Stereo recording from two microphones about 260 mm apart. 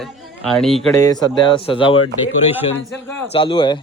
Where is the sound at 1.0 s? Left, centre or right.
Centre.